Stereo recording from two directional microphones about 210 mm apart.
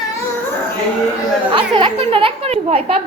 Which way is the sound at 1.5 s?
25° right (ahead or behind).